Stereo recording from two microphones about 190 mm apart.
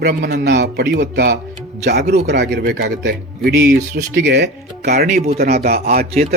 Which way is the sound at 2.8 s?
65° right (ahead or behind).